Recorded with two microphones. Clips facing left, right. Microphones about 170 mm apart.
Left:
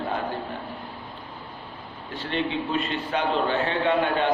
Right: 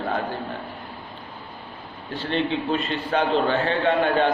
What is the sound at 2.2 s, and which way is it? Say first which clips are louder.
A man's voice: right 3 dB; 30° right (ahead or behind).